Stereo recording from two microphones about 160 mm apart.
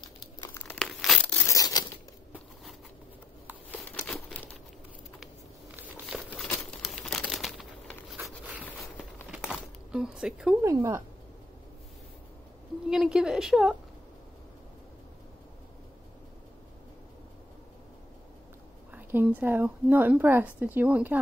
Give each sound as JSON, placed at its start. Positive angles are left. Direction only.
{"t": 0.7, "sound": "crumpling", "side_deg": 0}
{"t": 4.1, "sound": "crumpling", "side_deg": 10}
{"t": 6.1, "sound": "crumpling", "side_deg": 0}
{"t": 9.6, "sound": "zipper", "side_deg": -5}
{"t": 10.6, "sound": "a woman's voice", "side_deg": -20}
{"t": 12.9, "sound": "a woman's voice", "side_deg": -5}
{"t": 18.9, "sound": "a woman's voice", "side_deg": -10}